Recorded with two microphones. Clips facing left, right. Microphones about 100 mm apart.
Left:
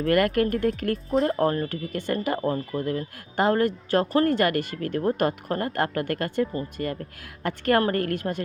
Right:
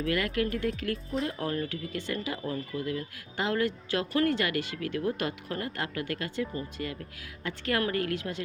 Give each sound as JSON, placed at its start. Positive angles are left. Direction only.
{"t": 0.1, "sound": "speech", "side_deg": 55}
{"t": 7.4, "sound": "speech", "side_deg": 55}